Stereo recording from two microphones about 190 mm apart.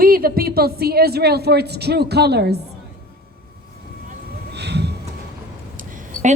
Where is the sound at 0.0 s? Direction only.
50° right (ahead or behind).